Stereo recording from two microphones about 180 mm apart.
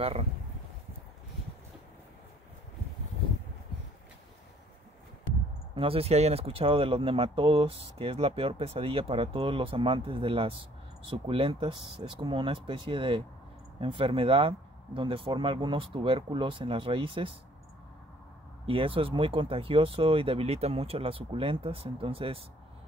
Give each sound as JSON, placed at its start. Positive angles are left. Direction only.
{"t": 0.0, "sound": "speech", "side_deg": -35}
{"t": 5.8, "sound": "speech", "side_deg": -30}
{"t": 18.7, "sound": "speech", "side_deg": -30}